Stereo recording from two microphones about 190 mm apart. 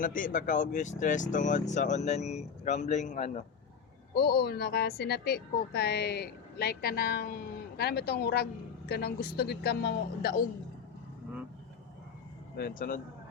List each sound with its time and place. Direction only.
0.0 s speech: 45° left (ahead or behind)
4.1 s a woman's voice: 55° left (ahead or behind)
12.5 s speech: 55° left (ahead or behind)